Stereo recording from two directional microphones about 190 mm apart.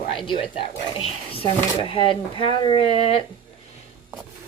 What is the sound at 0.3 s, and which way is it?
Speech, 30° left (ahead or behind).